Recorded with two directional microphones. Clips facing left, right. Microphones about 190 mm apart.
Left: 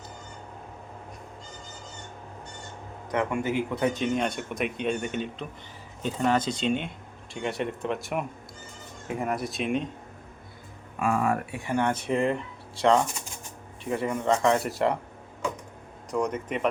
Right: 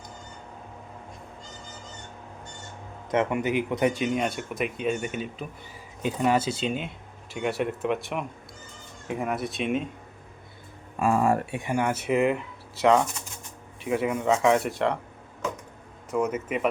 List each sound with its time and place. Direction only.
3.1 s speech: 20° right (ahead or behind); by 9.9 s centre (ahead or behind)
11.0 s speech: 30° right (ahead or behind)
11.6 s speech: 10° right (ahead or behind)
13.8 s speech: 5° right (ahead or behind)
16.1 s speech: 5° right (ahead or behind)